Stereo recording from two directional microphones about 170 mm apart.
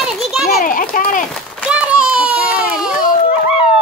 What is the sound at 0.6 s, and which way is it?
Speech, 55° left (ahead or behind).